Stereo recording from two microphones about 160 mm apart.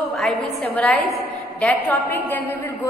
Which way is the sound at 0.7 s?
5° left (ahead or behind).